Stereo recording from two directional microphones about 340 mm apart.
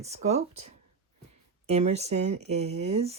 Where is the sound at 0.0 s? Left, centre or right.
Centre.